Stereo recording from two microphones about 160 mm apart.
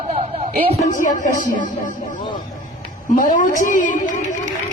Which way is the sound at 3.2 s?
55° left (ahead or behind).